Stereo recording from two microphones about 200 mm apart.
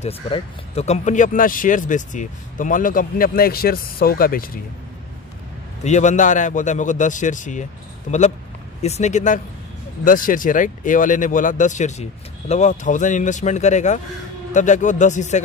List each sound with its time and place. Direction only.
0.0 s speech: 30° left (ahead or behind)
5.9 s speech: 35° left (ahead or behind)